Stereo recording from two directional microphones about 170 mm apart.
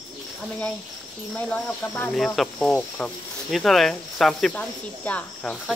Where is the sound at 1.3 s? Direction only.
10° left (ahead or behind).